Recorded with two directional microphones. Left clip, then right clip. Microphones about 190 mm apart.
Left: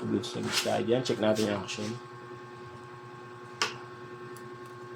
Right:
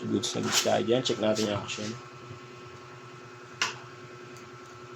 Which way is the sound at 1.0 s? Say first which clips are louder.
Even; 20° left (ahead or behind).